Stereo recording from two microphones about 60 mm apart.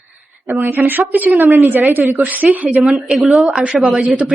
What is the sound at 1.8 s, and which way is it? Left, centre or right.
Speech, right.